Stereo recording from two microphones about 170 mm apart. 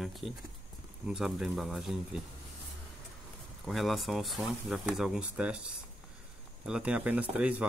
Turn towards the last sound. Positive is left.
turn(degrees=-10)  # may be behind; listen again after turning